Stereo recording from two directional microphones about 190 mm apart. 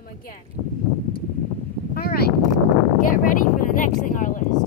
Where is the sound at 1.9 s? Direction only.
50° left (ahead or behind).